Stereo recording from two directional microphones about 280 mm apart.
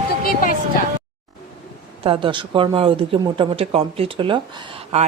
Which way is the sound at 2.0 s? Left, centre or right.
Centre.